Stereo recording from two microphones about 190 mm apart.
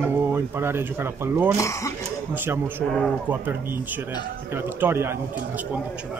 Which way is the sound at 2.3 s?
10° right (ahead or behind).